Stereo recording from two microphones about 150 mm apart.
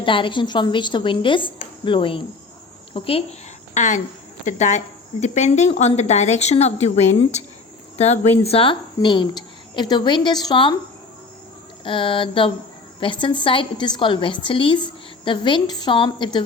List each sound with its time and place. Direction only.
0.0 s a woman's voice: 35° left (ahead or behind)
3.8 s a woman's voice: 55° left (ahead or behind); by 10.8 s 30° left (ahead or behind)
11.9 s a woman's voice: 35° left (ahead or behind)